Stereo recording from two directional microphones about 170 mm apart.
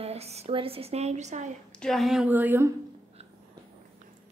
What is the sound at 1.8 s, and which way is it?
Speech, centre (ahead or behind).